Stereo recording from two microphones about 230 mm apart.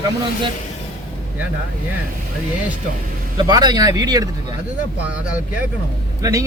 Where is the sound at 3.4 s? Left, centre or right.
Centre.